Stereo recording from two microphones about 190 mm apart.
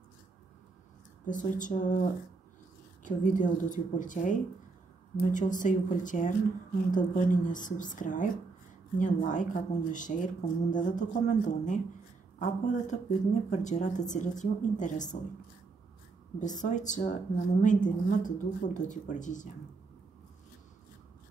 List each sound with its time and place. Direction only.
1.2 s a woman's voice: 40° left (ahead or behind)
16.3 s a woman's voice: 40° left (ahead or behind)